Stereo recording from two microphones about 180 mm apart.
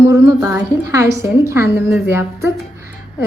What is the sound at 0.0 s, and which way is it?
A woman's voice, 15° right (ahead or behind).